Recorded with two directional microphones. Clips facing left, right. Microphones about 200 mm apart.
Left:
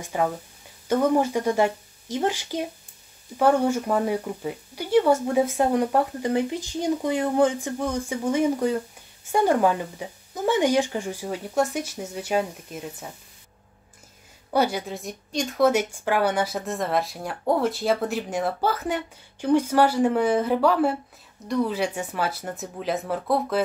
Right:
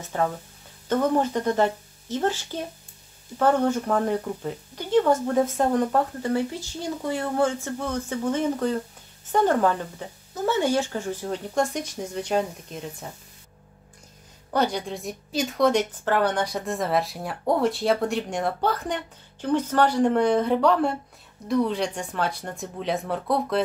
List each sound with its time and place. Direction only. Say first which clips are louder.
0.0 s speech: left 1 dB; 10° left (ahead or behind)
14.5 s a woman's voice: left 1 dB; 5° left (ahead or behind)